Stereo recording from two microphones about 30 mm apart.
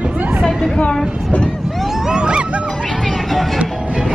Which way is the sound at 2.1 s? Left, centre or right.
Right.